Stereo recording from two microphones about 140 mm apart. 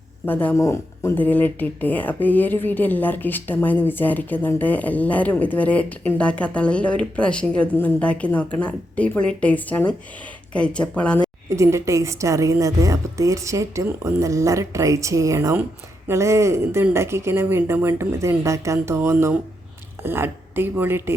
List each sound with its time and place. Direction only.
0.3 s speech: 15° left (ahead or behind)
11.4 s a woman's voice: 20° right (ahead or behind)